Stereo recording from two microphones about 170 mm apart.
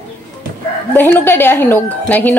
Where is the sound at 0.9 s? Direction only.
10° left (ahead or behind).